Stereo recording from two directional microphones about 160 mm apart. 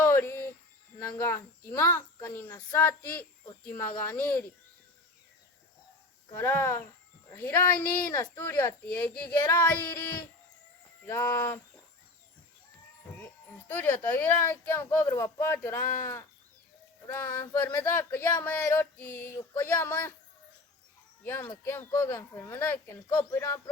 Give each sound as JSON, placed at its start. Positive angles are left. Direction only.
{"t": 0.0, "sound": "a sound", "side_deg": 15}
{"t": 0.9, "sound": "speech", "side_deg": 15}
{"t": 6.3, "sound": "speech", "side_deg": 15}
{"t": 13.7, "sound": "speech", "side_deg": 10}
{"t": 21.2, "sound": "speech", "side_deg": 15}